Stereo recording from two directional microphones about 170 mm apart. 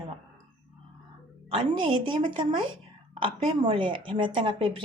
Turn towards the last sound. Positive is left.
turn(degrees=-30)  # may be behind; listen again after turning